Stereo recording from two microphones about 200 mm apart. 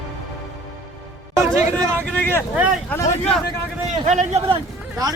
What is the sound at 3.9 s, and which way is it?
Speech, 35° right (ahead or behind).